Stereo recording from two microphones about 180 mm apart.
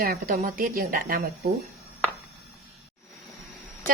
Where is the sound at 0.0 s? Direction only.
55° right (ahead or behind).